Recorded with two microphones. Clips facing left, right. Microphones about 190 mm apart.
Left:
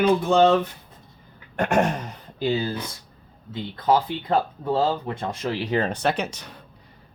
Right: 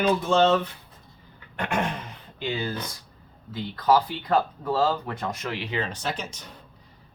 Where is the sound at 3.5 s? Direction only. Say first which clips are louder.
Even; 25° left (ahead or behind).